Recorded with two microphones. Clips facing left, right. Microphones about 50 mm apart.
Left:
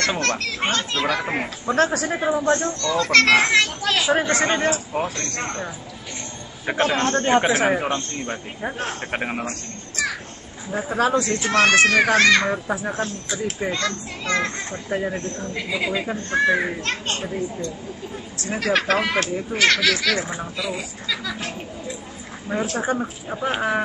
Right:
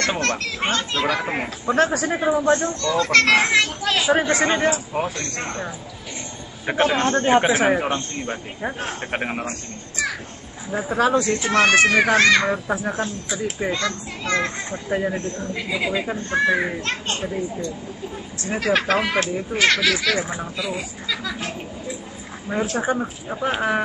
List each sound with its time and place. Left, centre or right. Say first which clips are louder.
0.0 s a man's voice: even; centre
3.3 s a man's voice: even; centre
10.7 s a man's voice: right 1 dB; centre
11.1 s speech: right 1 dB; right; by 12.7 s centre
13.0 s a man's voice: even; centre
16.8 s speech: even; centre
18.5 s speech: right 1 dB; centre
22.5 s a man's voice: right 1 dB; centre